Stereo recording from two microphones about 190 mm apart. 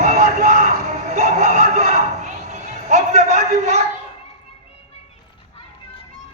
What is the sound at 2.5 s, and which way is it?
Music, 35° right (ahead or behind).